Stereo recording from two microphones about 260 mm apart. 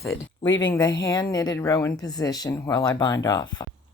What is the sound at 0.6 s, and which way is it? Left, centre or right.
Speech, centre.